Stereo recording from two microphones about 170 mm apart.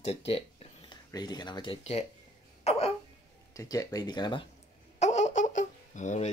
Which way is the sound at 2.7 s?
40° left (ahead or behind).